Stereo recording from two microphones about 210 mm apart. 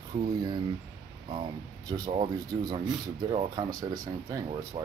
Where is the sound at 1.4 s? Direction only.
20° right (ahead or behind).